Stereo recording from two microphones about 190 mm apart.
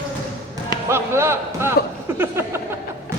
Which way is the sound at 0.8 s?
15° right (ahead or behind).